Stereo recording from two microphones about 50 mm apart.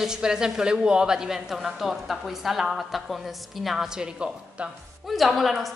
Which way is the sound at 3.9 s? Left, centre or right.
Centre.